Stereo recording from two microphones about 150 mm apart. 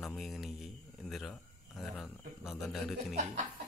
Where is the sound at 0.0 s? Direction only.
Centre (ahead or behind).